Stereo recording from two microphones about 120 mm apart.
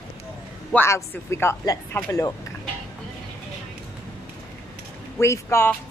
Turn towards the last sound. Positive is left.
turn(degrees=20)  # may be behind; listen again after turning